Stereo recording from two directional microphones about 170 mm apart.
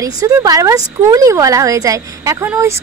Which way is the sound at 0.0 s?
20° right (ahead or behind).